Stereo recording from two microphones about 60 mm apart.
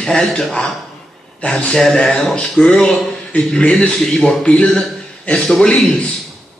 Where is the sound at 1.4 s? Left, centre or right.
Left.